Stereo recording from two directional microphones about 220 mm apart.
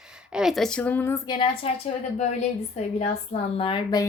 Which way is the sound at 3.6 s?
20° left (ahead or behind).